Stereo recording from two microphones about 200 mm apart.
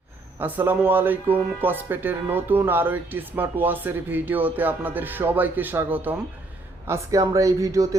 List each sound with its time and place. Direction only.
0.3 s speech: 10° right (ahead or behind)